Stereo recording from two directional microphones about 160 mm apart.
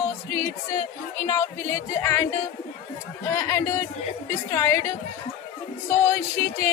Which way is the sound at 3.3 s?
15° left (ahead or behind).